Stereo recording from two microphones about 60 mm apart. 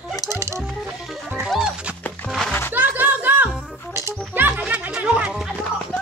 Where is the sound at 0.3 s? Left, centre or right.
Right.